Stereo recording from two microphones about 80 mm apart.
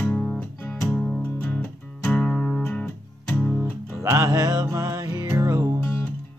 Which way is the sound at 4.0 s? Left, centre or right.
Right.